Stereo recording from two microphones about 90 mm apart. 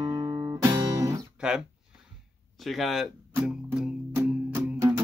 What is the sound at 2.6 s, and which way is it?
Speech, centre (ahead or behind).